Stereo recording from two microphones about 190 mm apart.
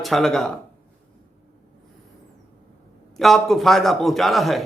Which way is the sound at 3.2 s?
Centre (ahead or behind).